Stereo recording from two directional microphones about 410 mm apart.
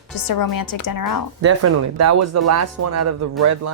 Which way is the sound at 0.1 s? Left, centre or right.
Left.